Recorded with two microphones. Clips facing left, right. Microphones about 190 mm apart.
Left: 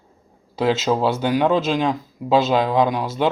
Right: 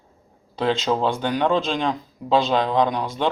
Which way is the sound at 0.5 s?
5° left (ahead or behind).